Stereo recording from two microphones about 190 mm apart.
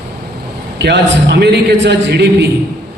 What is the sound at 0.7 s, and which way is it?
A man's voice, 65° right (ahead or behind).